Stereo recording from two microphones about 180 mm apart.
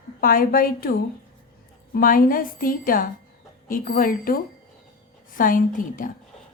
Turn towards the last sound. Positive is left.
turn(degrees=50)  # may be behind; listen again after turning